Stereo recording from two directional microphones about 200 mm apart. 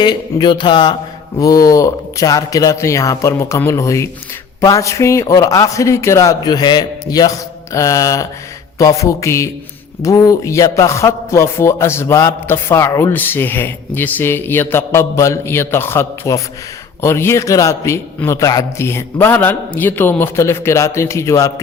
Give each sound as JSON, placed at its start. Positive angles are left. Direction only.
{"t": 0.0, "sound": "a man's voice", "side_deg": 20}